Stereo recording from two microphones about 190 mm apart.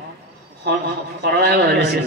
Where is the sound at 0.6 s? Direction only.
60° right (ahead or behind).